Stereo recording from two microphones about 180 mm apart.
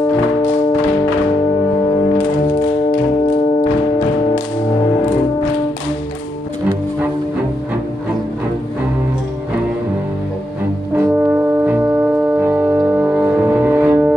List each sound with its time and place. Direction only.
11.0 s brass instrument: 10° right (ahead or behind)